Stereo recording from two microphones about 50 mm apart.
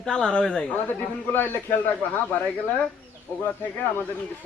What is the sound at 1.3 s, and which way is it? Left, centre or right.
Speech, left.